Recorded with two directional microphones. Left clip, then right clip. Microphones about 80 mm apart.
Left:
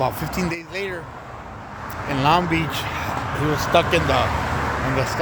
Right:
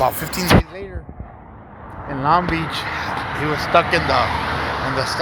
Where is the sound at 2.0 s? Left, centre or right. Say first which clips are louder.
Right 1 dB; left.